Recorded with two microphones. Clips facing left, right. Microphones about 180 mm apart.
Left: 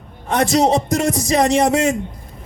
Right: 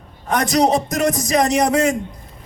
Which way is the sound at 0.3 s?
25° left (ahead or behind).